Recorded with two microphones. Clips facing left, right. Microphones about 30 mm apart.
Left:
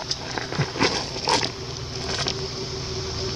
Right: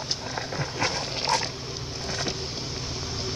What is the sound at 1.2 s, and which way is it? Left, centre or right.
Pig, left.